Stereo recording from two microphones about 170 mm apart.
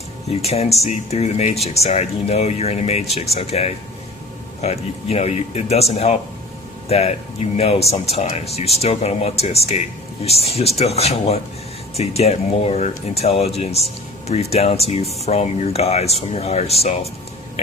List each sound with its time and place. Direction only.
0.3 s speech: 35° left (ahead or behind)